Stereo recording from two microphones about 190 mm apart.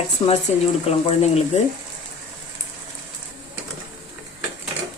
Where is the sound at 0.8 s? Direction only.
35° left (ahead or behind).